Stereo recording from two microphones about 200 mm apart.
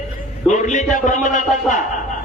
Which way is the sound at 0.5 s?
35° left (ahead or behind).